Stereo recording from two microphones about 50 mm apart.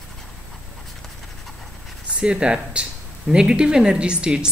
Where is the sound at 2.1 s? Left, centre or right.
Centre.